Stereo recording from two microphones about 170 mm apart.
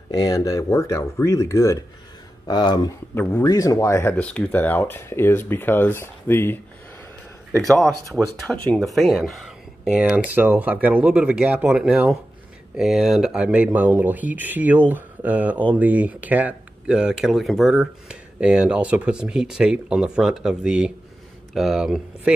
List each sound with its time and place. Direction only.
0.1 s speech: 20° left (ahead or behind)
3.2 s speech: 10° left (ahead or behind)
7.8 s speech: centre (ahead or behind)